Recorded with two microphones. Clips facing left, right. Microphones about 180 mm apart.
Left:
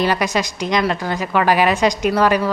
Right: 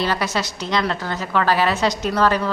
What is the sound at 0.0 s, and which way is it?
A woman's voice, 15° left (ahead or behind).